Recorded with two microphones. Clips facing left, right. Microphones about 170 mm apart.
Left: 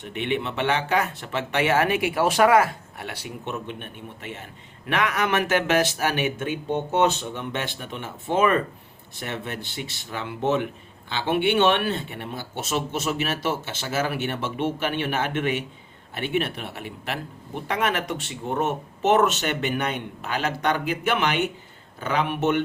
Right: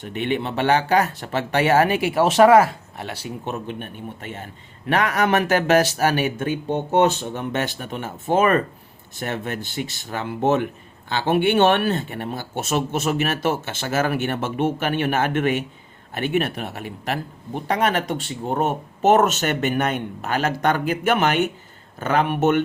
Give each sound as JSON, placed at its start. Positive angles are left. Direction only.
{"t": 0.0, "sound": "a man's voice", "side_deg": -40}